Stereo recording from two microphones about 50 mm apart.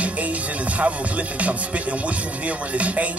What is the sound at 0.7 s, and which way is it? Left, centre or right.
Music, right.